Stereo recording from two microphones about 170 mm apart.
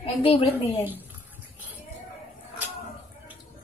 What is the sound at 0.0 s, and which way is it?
Speech, 35° left (ahead or behind).